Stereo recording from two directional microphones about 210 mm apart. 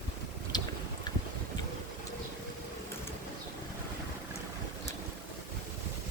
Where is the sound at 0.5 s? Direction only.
20° left (ahead or behind).